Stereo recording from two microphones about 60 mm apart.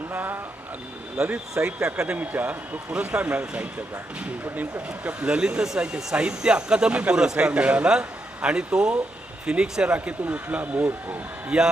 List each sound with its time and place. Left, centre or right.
0.1 s speech: right
1.5 s speech: centre
5.0 s speech: centre